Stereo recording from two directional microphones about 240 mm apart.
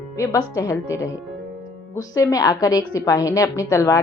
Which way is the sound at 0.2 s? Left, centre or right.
Centre.